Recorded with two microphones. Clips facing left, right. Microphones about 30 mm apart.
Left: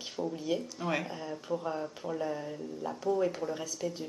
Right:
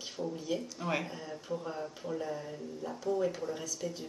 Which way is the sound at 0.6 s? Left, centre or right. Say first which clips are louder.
Left 1 dB; centre.